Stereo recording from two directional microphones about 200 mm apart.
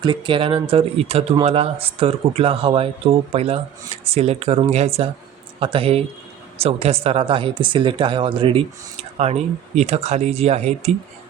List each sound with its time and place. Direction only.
0.0 s speech: 25° right (ahead or behind)